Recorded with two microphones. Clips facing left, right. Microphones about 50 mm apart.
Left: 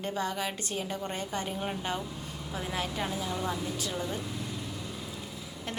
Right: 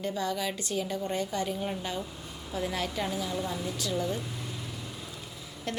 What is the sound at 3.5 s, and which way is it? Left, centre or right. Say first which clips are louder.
Speech: even; left.